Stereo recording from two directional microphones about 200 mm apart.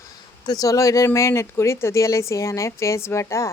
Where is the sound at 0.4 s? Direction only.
20° left (ahead or behind).